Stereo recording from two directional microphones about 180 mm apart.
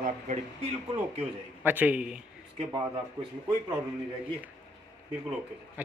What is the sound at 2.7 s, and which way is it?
Speech, 25° right (ahead or behind).